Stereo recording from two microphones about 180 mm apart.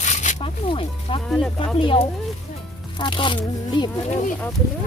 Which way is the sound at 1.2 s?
Centre (ahead or behind).